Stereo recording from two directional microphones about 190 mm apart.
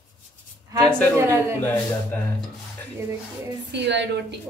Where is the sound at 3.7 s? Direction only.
65° right (ahead or behind).